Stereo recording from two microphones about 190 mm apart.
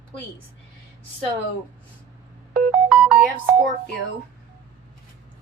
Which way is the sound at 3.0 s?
Centre (ahead or behind).